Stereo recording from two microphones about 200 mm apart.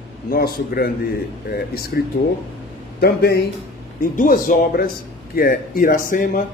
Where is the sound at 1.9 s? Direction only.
50° left (ahead or behind).